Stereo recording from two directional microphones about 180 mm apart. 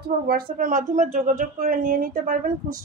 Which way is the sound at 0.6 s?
45° right (ahead or behind).